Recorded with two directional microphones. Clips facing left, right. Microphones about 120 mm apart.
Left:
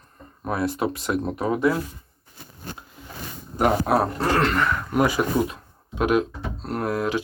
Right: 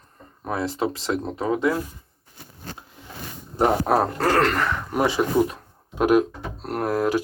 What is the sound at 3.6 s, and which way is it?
Speech, 35° right (ahead or behind).